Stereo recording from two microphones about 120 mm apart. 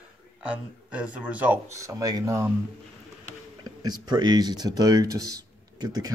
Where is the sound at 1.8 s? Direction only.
30° right (ahead or behind).